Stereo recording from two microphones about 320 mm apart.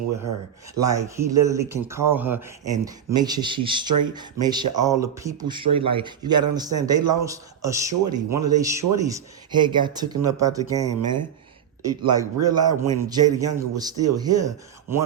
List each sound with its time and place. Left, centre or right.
0.2 s speech: right
0.8 s speech: centre